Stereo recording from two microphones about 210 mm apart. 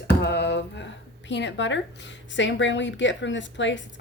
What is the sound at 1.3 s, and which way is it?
A woman's voice, 60° left (ahead or behind).